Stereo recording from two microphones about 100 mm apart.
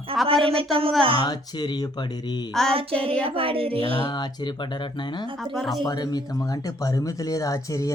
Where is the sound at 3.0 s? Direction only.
70° right (ahead or behind).